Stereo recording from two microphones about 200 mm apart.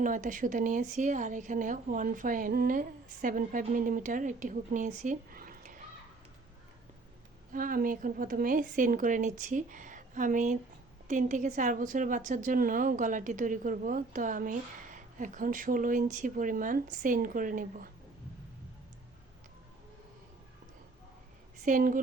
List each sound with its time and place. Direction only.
0.0 s a woman's voice: 40° right (ahead or behind)
7.5 s a woman's voice: 45° right (ahead or behind)
21.6 s a woman's voice: 40° right (ahead or behind)